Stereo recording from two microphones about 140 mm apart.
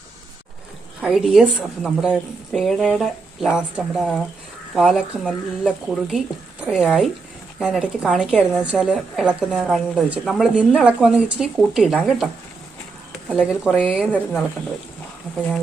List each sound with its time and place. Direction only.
1.0 s a woman's voice: 5° right (ahead or behind)